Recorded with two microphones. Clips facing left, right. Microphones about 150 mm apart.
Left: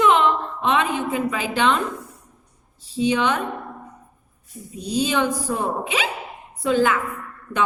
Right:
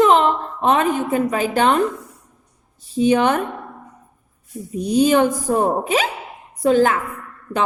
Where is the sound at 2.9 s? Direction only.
50° right (ahead or behind).